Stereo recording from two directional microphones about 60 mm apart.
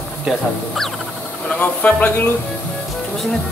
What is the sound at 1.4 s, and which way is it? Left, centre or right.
Speech, left.